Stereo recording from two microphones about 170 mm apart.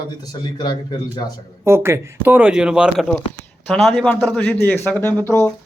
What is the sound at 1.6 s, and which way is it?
Speech, 15° right (ahead or behind).